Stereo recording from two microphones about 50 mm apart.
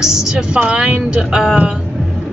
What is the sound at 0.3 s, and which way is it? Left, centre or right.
Speech, centre.